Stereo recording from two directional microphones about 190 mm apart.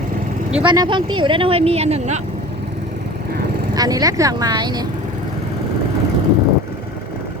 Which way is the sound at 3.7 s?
20° right (ahead or behind).